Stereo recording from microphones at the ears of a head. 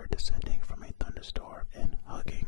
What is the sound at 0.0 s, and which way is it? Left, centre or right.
Whispering, left.